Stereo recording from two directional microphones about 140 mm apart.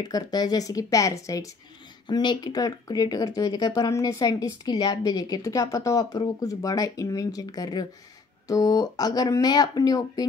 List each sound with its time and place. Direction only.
0.0 s a woman's voice: 30° left (ahead or behind)